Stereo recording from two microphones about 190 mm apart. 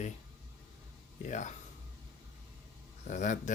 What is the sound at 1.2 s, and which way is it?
Speech, 40° left (ahead or behind).